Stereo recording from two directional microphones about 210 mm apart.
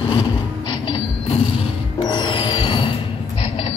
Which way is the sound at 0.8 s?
25° left (ahead or behind).